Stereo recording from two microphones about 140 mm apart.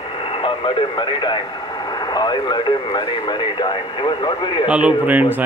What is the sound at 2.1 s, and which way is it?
Speech, 30° left (ahead or behind).